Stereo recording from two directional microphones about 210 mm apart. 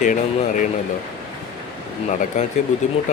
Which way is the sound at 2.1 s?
35° left (ahead or behind).